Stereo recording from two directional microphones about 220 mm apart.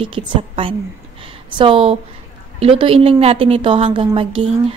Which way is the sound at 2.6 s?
25° right (ahead or behind).